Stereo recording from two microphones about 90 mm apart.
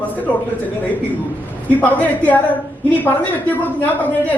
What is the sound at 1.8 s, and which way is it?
Speech, 20° left (ahead or behind).